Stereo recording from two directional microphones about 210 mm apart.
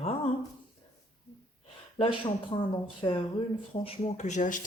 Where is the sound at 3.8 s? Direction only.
35° left (ahead or behind).